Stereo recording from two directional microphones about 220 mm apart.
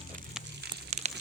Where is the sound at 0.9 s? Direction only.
30° right (ahead or behind).